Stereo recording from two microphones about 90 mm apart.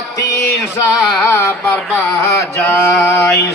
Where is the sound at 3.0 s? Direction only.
30° left (ahead or behind).